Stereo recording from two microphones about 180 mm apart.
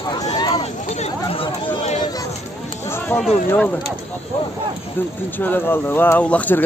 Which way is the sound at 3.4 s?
10° left (ahead or behind).